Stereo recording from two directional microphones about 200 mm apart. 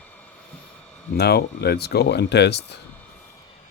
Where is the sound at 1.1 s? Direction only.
55° left (ahead or behind).